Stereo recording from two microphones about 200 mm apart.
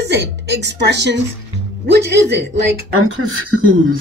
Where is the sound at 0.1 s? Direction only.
60° right (ahead or behind).